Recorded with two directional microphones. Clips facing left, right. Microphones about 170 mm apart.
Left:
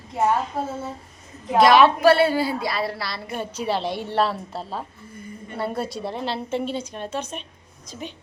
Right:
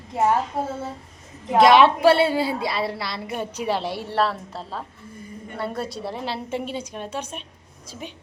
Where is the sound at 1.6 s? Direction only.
25° right (ahead or behind).